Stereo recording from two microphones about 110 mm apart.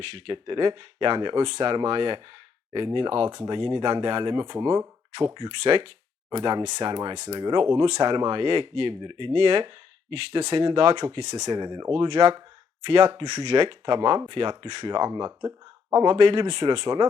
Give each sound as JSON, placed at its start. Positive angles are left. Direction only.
{"t": 0.0, "sound": "speech", "side_deg": -50}
{"t": 16.0, "sound": "speech", "side_deg": -45}